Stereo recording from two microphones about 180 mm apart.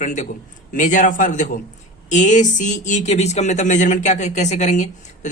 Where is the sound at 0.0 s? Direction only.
45° left (ahead or behind).